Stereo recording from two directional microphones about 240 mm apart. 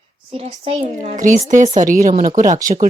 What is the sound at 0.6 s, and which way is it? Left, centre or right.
A woman's voice, right.